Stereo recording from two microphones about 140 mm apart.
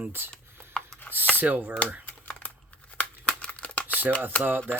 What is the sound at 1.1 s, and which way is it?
Speech, 15° right (ahead or behind).